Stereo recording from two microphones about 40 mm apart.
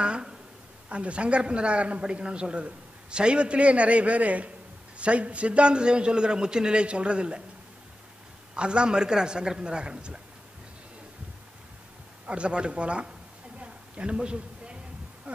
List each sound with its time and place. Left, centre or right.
0.0 s a sound: right
0.8 s a man's voice: right
8.5 s a man's voice: right
12.3 s a man's voice: right
13.6 s a sound: right
15.3 s heart sounds: right